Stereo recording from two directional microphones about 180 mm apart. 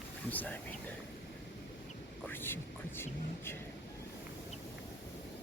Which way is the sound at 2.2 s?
10° left (ahead or behind).